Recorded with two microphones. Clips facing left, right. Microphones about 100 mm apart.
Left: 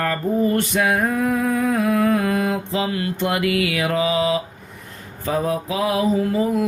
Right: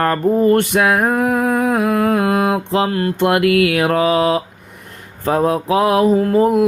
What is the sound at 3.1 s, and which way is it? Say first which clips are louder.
Mantra: right 8 dB; 60° right (ahead or behind).